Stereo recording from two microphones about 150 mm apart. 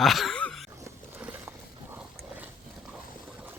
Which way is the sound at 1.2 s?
10° right (ahead or behind).